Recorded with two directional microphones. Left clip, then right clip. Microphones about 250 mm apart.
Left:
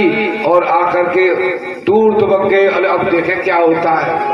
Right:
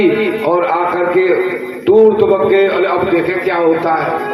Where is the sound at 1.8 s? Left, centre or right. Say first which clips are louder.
Right 2 dB; left.